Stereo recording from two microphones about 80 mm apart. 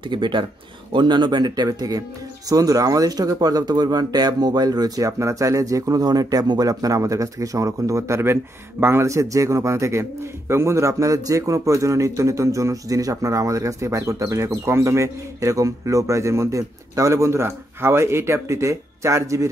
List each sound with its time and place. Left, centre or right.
0.1 s speech: right
0.9 s a man's voice: right